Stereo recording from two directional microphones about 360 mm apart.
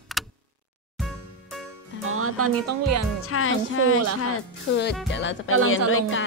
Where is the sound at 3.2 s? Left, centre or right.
Left.